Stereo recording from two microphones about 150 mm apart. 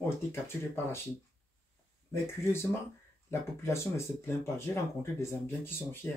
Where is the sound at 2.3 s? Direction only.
15° left (ahead or behind).